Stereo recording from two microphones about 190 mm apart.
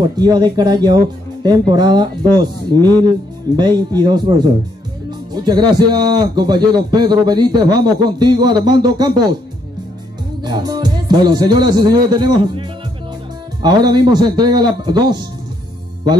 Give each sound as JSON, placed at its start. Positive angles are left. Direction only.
{"t": 0.0, "sound": "speech", "side_deg": -20}
{"t": 10.4, "sound": "a man's voice", "side_deg": -20}